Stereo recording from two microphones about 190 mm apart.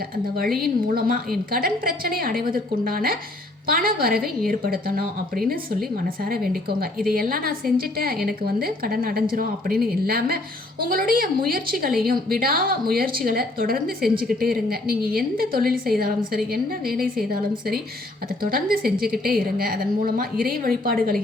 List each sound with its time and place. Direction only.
0.6 s a woman's voice: 50° right (ahead or behind)
6.2 s a woman's voice: 50° right (ahead or behind)